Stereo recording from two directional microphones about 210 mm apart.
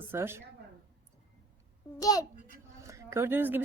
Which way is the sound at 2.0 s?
15° left (ahead or behind).